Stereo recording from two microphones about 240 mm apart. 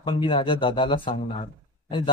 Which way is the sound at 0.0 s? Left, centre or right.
Left.